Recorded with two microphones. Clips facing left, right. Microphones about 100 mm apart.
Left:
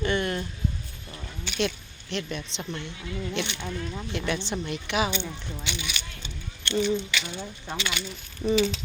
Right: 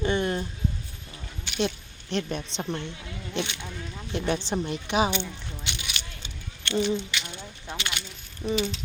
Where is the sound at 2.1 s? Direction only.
40° right (ahead or behind).